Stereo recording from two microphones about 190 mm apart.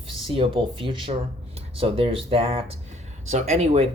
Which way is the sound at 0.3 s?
25° right (ahead or behind).